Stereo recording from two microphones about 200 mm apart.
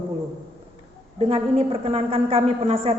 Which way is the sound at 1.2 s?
30° right (ahead or behind).